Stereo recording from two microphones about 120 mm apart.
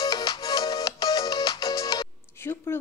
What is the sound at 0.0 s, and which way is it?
Music, 35° left (ahead or behind).